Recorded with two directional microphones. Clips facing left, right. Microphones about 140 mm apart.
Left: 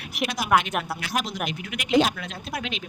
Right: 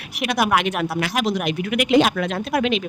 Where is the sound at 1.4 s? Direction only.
65° right (ahead or behind).